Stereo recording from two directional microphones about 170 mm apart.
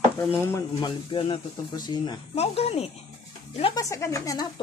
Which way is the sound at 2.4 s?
35° left (ahead or behind).